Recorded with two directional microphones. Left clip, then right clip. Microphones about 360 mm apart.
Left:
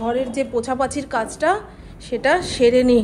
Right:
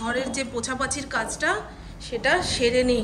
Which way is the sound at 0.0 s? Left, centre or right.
Centre.